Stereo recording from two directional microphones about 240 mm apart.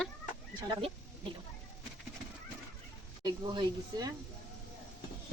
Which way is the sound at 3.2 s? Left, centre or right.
Centre.